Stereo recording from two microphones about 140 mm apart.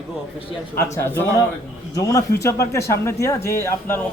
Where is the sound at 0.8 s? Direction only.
20° left (ahead or behind).